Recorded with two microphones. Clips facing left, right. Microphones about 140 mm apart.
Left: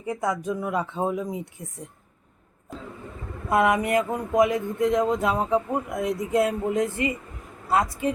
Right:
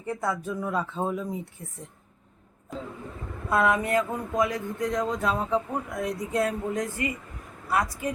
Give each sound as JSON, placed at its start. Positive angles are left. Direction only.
{"t": 0.0, "sound": "speech", "side_deg": 15}
{"t": 3.5, "sound": "speech", "side_deg": 15}